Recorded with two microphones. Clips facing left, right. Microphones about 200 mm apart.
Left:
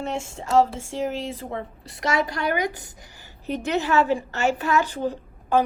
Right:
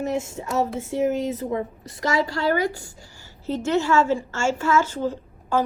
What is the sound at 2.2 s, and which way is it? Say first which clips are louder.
A woman's voice: right 3 dB; 20° left (ahead or behind).